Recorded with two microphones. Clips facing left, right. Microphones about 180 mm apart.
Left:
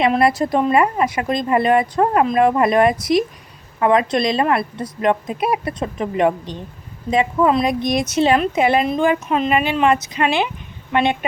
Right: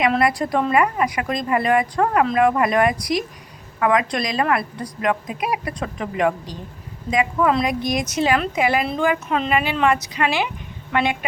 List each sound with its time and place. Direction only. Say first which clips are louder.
0.1 s a woman's voice: left 3 dB; 25° left (ahead or behind)